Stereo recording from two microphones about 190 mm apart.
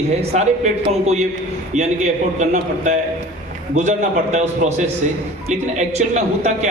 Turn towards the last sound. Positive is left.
turn(degrees=-40)  # may be behind; listen again after turning